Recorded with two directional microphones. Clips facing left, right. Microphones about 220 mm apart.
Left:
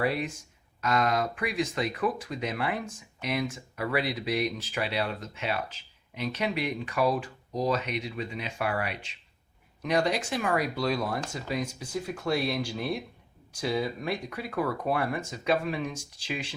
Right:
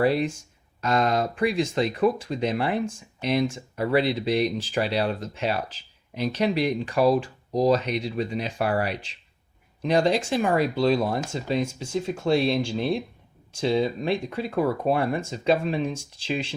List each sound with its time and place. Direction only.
0.0 s speech: 30° right (ahead or behind)